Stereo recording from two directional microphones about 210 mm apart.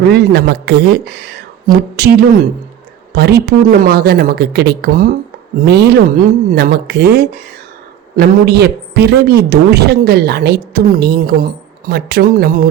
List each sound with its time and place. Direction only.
0.1 s a woman's voice: 50° right (ahead or behind)